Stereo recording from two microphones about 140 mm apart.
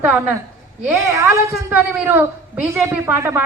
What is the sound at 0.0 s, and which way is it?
A woman's voice, 10° right (ahead or behind).